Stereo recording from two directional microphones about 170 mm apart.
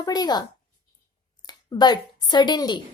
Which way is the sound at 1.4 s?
25° left (ahead or behind).